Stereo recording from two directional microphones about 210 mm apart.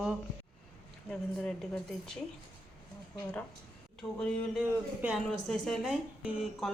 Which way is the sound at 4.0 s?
Centre (ahead or behind).